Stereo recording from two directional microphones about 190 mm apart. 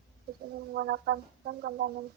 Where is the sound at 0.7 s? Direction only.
60° right (ahead or behind).